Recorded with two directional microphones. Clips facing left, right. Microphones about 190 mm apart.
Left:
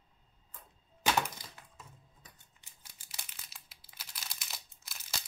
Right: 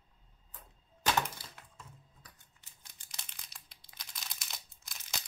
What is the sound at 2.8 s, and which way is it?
Crumpling, 10° left (ahead or behind).